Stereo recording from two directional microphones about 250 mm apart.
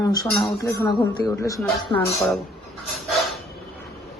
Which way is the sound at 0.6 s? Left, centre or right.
Centre.